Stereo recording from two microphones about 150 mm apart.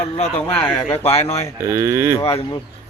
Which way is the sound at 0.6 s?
Centre (ahead or behind).